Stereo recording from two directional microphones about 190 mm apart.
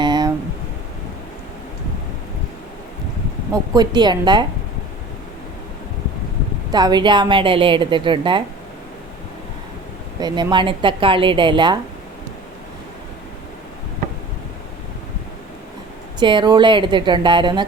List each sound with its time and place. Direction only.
0.0 s a sound: 20° right (ahead or behind)
3.5 s a woman's voice: 20° right (ahead or behind)
6.7 s a woman's voice: 20° right (ahead or behind)
10.2 s a woman's voice: 20° right (ahead or behind)
16.2 s a woman's voice: 25° right (ahead or behind)